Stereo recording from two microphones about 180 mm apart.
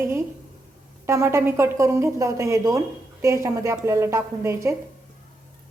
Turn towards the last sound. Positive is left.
turn(degrees=-15)  # may be behind; listen again after turning